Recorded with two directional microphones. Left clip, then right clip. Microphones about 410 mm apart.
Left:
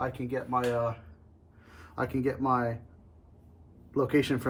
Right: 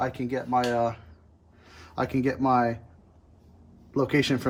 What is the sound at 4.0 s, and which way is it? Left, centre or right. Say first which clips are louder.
Speech: right 2 dB; right.